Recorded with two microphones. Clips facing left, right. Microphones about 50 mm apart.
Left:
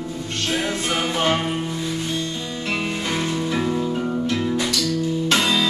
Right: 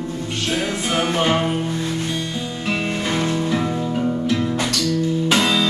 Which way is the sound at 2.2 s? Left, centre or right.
Right.